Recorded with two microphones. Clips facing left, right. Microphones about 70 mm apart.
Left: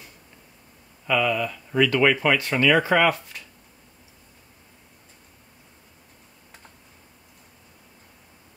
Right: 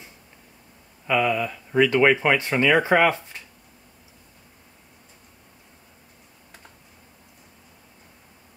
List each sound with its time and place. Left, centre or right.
1.0 s speech: right